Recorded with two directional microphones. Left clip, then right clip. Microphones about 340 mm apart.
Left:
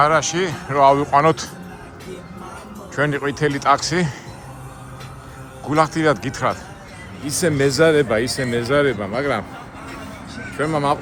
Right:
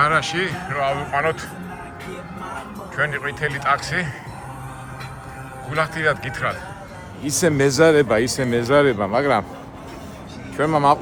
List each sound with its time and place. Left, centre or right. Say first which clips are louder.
0.0 s speech: left 2 dB; centre
2.9 s speech: left 2 dB; centre
5.7 s speech: left 4 dB; centre
7.3 s speech: even; centre
10.6 s speech: right 3 dB; centre